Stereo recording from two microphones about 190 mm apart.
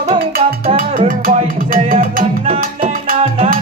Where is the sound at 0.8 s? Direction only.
50° right (ahead or behind).